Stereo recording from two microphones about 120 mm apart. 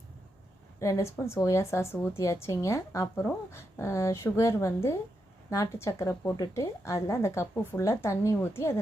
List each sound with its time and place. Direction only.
0.8 s a woman's voice: 25° left (ahead or behind)